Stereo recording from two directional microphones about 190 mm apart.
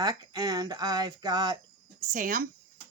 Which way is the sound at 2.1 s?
45° right (ahead or behind).